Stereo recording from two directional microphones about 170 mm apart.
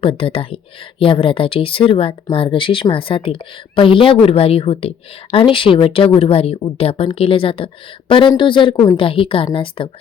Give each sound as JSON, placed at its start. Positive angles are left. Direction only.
{"t": 0.0, "sound": "speech", "side_deg": 30}